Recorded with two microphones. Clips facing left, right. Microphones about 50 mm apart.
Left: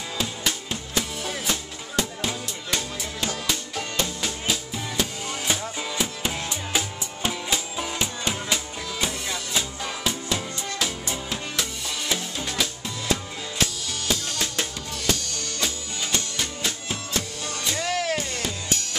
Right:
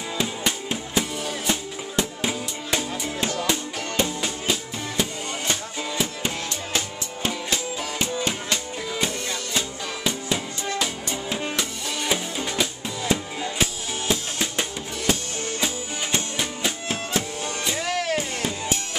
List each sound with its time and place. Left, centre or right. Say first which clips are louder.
0.2 s music: right 2 dB; centre
3.3 s music: right 3 dB; centre
12.1 s drum: right 3 dB; centre
13.1 s music: right 2 dB; centre